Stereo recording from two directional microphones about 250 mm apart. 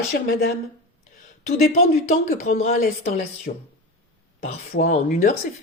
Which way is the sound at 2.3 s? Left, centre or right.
Left.